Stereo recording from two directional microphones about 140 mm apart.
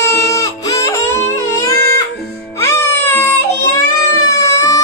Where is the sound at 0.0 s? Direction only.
20° left (ahead or behind).